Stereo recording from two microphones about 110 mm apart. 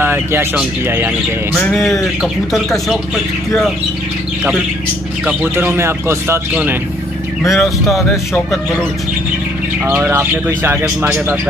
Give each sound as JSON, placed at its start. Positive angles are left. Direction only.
{"t": 0.0, "sound": "bird", "side_deg": -20}
{"t": 0.8, "sound": "speech", "side_deg": -20}
{"t": 1.5, "sound": "speech", "side_deg": 5}
{"t": 5.2, "sound": "speech", "side_deg": -15}
{"t": 7.4, "sound": "speech", "side_deg": 0}
{"t": 9.8, "sound": "speech", "side_deg": -20}